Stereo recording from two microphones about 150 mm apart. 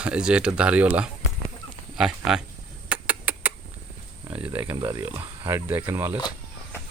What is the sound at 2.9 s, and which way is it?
Rodents, 10° right (ahead or behind).